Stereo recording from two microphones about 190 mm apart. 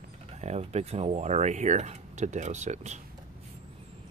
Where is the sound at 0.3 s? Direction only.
35° right (ahead or behind).